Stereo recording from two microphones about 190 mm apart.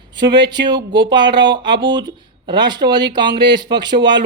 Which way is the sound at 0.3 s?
25° right (ahead or behind).